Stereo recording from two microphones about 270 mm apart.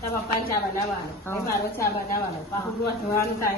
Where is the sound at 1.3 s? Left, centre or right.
Centre.